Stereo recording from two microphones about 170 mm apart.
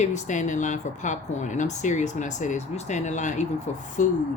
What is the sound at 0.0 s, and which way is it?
Speech, 45° left (ahead or behind).